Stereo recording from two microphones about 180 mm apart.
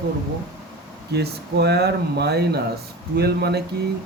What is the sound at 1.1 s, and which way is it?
Speech, 65° right (ahead or behind).